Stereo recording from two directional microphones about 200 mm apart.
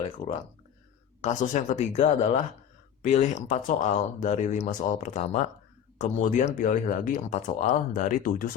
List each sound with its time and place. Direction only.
1.2 s speech: 40° left (ahead or behind)